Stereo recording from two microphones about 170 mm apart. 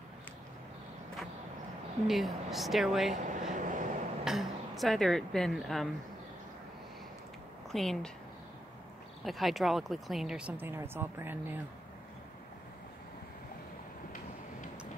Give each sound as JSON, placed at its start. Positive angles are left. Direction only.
{"t": 2.0, "sound": "speech", "side_deg": 0}
{"t": 3.2, "sound": "vehicle", "side_deg": -45}
{"t": 4.2, "sound": "speech", "side_deg": 0}
{"t": 7.7, "sound": "speech", "side_deg": 0}
{"t": 9.2, "sound": "speech", "side_deg": 0}